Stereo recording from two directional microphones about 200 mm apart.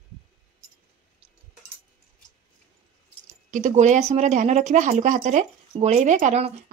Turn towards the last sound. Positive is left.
turn(degrees=-35)  # may be behind; listen again after turning